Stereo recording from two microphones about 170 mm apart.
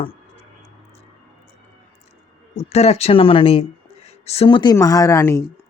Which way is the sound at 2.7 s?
40° left (ahead or behind).